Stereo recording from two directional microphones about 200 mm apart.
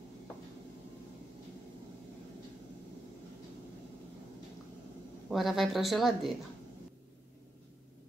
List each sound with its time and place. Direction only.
5.3 s speech: centre (ahead or behind)